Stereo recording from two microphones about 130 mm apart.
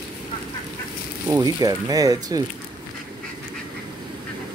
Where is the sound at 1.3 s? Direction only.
30° right (ahead or behind).